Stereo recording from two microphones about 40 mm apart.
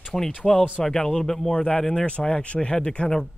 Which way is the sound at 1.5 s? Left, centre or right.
Left.